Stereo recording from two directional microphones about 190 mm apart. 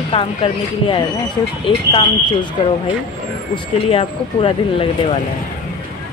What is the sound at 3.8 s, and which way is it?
A woman's voice, 30° left (ahead or behind).